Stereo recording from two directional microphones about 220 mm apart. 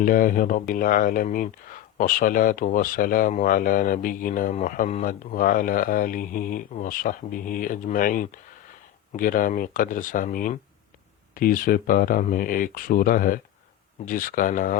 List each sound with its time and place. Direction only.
0.0 s speech: 40° left (ahead or behind)